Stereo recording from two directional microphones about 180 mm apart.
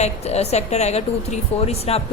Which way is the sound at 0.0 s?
35° left (ahead or behind).